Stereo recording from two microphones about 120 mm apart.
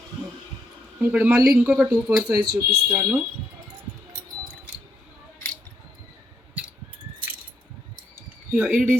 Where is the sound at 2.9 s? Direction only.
10° right (ahead or behind).